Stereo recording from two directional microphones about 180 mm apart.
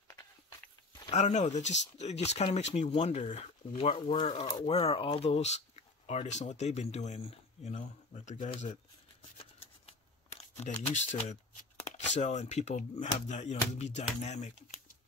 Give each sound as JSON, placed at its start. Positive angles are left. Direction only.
{"t": 1.1, "sound": "speech", "side_deg": 40}
{"t": 9.4, "sound": "shuffling cards", "side_deg": 30}
{"t": 12.2, "sound": "speech", "side_deg": 40}